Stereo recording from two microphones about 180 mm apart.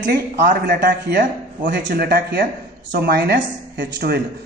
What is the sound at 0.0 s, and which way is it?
A man's voice, 65° right (ahead or behind).